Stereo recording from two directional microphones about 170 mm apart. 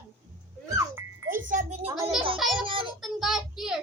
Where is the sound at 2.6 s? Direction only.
30° right (ahead or behind).